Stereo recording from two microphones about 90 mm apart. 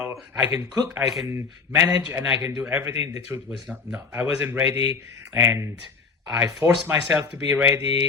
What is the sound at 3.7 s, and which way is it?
Speech, 5° right (ahead or behind).